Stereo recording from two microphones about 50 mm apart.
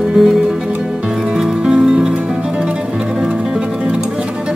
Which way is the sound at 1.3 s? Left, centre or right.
Centre.